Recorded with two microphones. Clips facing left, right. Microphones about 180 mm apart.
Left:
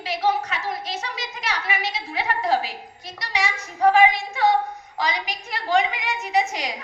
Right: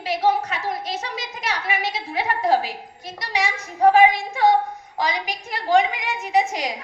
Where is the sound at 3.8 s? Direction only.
50° right (ahead or behind).